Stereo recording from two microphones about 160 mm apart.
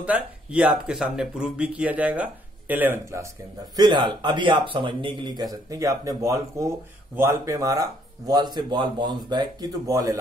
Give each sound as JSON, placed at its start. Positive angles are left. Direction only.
{"t": 0.0, "sound": "speech", "side_deg": -10}
{"t": 3.7, "sound": "speech", "side_deg": -25}